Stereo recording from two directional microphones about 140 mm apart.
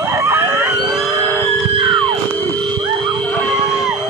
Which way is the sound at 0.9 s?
Centre (ahead or behind).